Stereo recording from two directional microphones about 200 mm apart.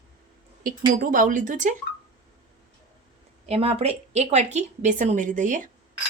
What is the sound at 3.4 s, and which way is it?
A woman's voice, 30° right (ahead or behind).